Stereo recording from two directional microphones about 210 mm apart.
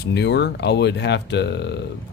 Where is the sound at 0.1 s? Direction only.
55° left (ahead or behind).